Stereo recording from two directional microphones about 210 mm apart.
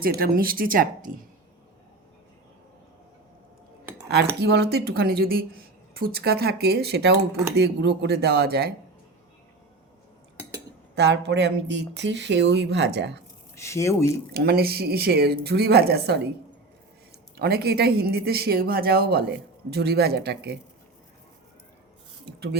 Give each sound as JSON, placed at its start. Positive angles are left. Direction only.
{"t": 0.0, "sound": "speech", "side_deg": -45}
{"t": 4.1, "sound": "speech", "side_deg": -50}
{"t": 10.9, "sound": "speech", "side_deg": -55}
{"t": 13.6, "sound": "speech", "side_deg": 15}
{"t": 14.3, "sound": "speech", "side_deg": -50}
{"t": 17.3, "sound": "speech", "side_deg": -50}